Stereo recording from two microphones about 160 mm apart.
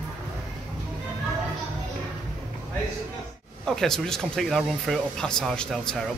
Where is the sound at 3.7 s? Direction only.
5° left (ahead or behind).